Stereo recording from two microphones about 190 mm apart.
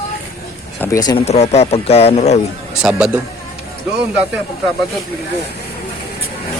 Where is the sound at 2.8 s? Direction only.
5° right (ahead or behind).